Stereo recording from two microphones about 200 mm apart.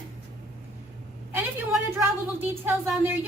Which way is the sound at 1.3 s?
5° right (ahead or behind).